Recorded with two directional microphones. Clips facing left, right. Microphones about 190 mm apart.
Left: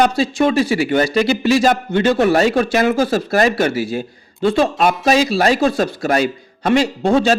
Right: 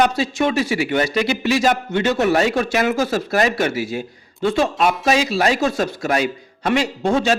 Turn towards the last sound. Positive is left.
turn(degrees=30)  # may be behind; listen again after turning